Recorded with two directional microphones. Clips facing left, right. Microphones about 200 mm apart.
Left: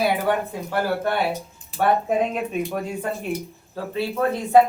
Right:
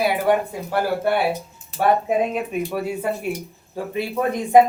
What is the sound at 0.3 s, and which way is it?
A man's voice, 10° right (ahead or behind).